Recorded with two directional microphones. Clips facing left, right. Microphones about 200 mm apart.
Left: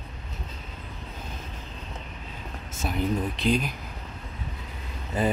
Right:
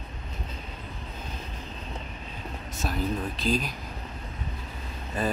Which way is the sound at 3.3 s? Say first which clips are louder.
Left 2 dB; 65° left (ahead or behind).